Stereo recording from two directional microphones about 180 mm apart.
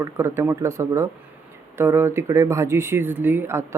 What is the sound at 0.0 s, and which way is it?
Speech, 15° right (ahead or behind).